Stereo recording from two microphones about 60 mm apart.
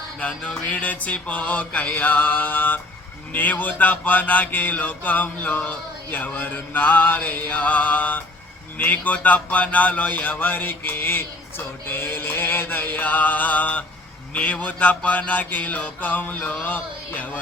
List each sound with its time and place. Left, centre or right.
0.2 s music: left